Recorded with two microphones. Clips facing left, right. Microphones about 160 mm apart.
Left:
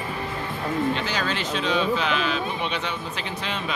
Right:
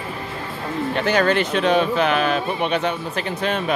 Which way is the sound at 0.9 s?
55° right (ahead or behind).